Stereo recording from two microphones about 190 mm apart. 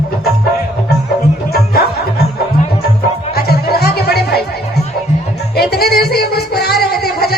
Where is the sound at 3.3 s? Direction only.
55° left (ahead or behind).